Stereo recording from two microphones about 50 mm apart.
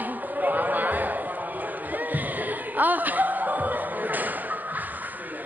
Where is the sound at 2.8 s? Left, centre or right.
Right.